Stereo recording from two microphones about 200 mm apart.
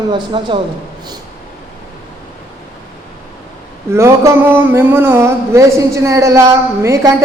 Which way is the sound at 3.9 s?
15° right (ahead or behind).